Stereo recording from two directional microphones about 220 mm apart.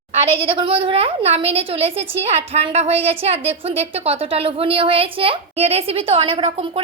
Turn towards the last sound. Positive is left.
turn(degrees=-25)  # may be behind; listen again after turning